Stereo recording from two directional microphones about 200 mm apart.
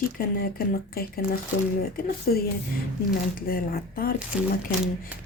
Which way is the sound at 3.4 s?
50° left (ahead or behind).